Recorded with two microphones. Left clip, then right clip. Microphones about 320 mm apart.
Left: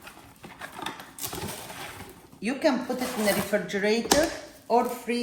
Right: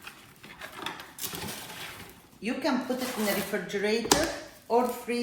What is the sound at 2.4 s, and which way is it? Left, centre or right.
Speech, left.